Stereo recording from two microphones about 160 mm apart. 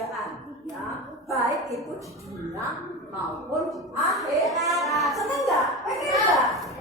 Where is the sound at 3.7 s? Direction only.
Centre (ahead or behind).